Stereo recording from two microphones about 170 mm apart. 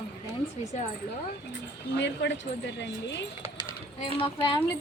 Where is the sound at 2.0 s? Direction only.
90° left.